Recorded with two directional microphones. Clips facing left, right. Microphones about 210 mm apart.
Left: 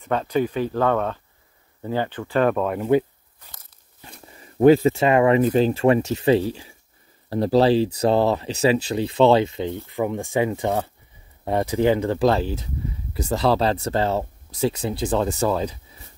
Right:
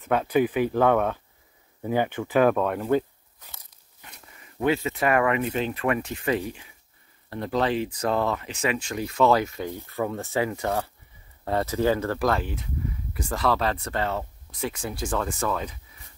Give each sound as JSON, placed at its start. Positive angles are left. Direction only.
{"t": 0.0, "sound": "speech", "side_deg": -10}
{"t": 4.0, "sound": "speech", "side_deg": 30}
{"t": 12.3, "sound": "speech", "side_deg": 30}